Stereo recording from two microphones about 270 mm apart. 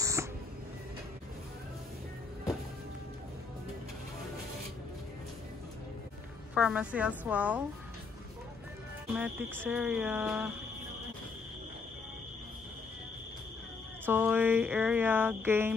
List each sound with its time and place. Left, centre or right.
0.0 s a sound: centre
6.5 s a woman's voice: centre
9.1 s speech: centre
14.0 s speech: centre